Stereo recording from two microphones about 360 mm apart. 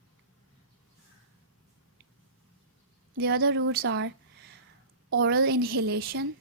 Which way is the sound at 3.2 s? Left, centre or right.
Right.